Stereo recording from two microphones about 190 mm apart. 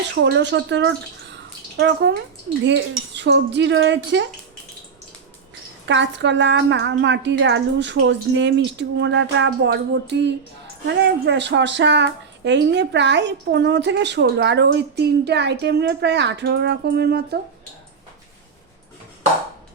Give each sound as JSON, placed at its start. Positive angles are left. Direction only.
{"t": 0.1, "sound": "a woman's voice", "side_deg": -65}
{"t": 5.8, "sound": "a woman's voice", "side_deg": -70}